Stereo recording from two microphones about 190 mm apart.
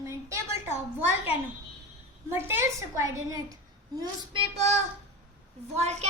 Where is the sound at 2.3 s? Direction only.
15° right (ahead or behind).